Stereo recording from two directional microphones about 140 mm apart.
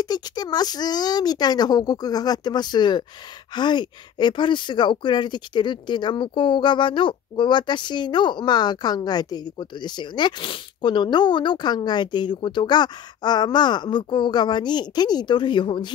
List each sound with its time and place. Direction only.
0.0 s speech: 30° left (ahead or behind)